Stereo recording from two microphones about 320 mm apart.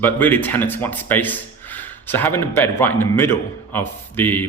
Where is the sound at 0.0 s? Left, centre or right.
Centre.